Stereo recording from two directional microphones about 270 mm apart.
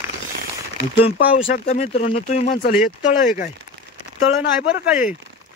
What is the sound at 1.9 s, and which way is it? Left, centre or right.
Speech, left.